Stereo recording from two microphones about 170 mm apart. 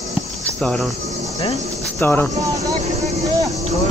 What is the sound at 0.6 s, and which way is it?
Cricket, 5° left (ahead or behind).